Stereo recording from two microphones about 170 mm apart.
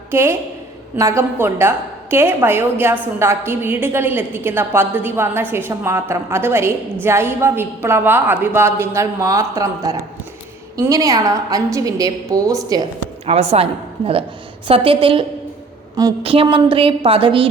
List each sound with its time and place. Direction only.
0.1 s a woman's voice: 15° right (ahead or behind)
13.2 s a woman's voice: 40° right (ahead or behind)
16.2 s a woman's voice: 35° right (ahead or behind)